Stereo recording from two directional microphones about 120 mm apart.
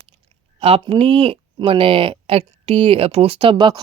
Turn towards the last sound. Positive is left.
turn(degrees=-40)  # may be behind; listen again after turning